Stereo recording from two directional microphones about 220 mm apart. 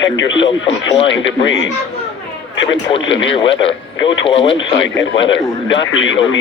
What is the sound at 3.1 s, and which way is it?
Speech, 60° left (ahead or behind).